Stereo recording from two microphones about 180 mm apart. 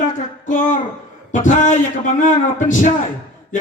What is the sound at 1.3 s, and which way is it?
Speech, 45° left (ahead or behind).